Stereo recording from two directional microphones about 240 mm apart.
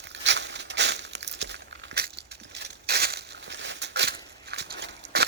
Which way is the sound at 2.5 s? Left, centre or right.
Right.